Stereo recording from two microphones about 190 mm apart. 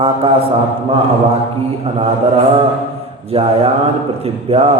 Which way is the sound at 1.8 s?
30° right (ahead or behind).